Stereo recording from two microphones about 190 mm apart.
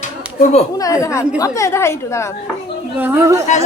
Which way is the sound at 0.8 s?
15° left (ahead or behind).